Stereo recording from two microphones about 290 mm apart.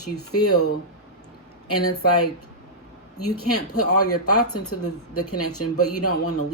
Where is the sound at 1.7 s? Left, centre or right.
Left.